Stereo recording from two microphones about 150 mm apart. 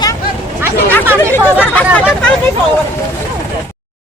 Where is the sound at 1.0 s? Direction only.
15° right (ahead or behind).